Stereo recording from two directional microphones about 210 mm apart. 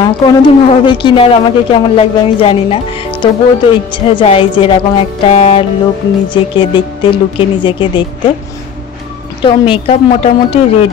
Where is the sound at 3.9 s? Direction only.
25° left (ahead or behind).